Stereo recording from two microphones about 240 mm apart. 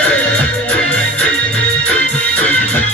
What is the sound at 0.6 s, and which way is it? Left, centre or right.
Music, centre.